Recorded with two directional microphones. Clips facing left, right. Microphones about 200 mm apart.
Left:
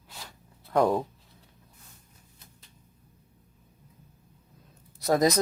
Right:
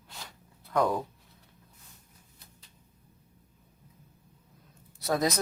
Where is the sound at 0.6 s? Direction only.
30° left (ahead or behind).